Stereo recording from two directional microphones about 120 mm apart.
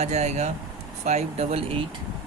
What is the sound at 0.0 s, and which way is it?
Speech, 70° right (ahead or behind).